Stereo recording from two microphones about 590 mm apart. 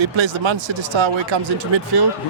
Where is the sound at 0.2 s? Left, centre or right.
Right.